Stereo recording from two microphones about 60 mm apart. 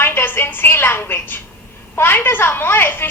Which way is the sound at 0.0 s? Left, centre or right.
Left.